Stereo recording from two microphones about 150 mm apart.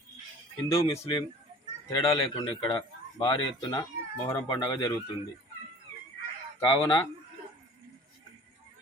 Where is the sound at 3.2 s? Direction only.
30° left (ahead or behind).